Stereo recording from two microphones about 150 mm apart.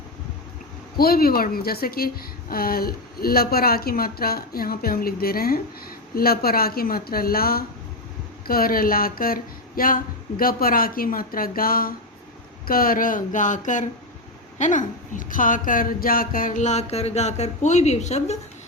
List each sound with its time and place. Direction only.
0.9 s a woman's voice: 90° left
8.4 s speech: 75° left (ahead or behind); by 18.3 s 45° left (ahead or behind)